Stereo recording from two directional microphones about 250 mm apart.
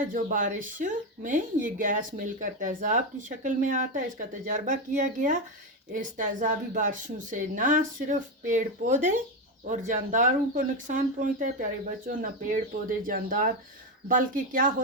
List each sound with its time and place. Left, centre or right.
0.1 s speech: right